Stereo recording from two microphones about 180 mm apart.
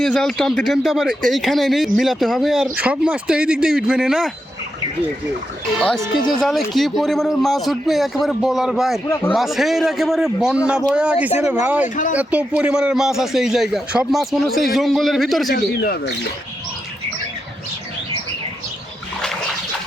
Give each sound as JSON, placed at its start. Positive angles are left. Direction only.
{"t": 0.0, "sound": "speech", "side_deg": 5}
{"t": 6.4, "sound": "speech", "side_deg": 0}
{"t": 15.5, "sound": "speech", "side_deg": 60}